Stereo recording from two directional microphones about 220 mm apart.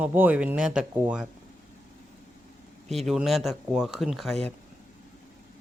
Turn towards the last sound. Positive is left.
turn(degrees=0)  # may be behind; listen again after turning